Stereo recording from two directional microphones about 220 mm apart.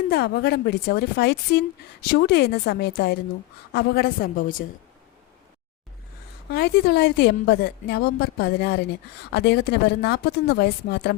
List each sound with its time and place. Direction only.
0.1 s a woman's voice: 45° left (ahead or behind)
6.5 s a woman's voice: 50° left (ahead or behind)